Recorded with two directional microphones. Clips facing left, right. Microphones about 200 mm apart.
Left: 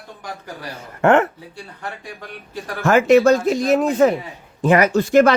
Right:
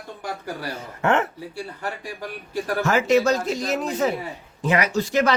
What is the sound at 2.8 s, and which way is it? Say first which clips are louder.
Speech: left 7 dB; 55° left (ahead or behind).